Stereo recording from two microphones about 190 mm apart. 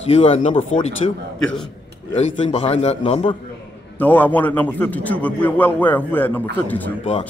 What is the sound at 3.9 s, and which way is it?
A man's voice, 10° left (ahead or behind).